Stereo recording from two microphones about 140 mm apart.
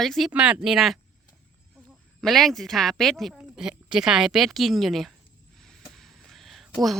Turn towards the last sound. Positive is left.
turn(degrees=0)  # may be behind; listen again after turning